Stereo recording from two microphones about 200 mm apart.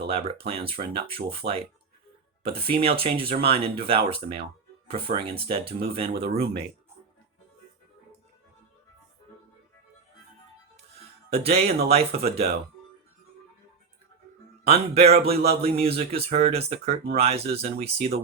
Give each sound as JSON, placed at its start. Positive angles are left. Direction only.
{"t": 0.2, "sound": "speech", "side_deg": -30}
{"t": 11.3, "sound": "speech", "side_deg": -30}
{"t": 14.6, "sound": "speech", "side_deg": -30}